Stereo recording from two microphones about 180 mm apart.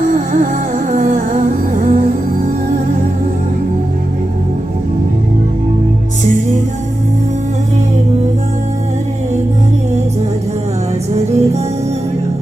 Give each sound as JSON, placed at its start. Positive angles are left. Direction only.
{"t": 0.0, "sound": "music", "side_deg": -50}
{"t": 0.9, "sound": "humming", "side_deg": -50}
{"t": 2.0, "sound": "music", "side_deg": -50}
{"t": 11.1, "sound": "music", "side_deg": -35}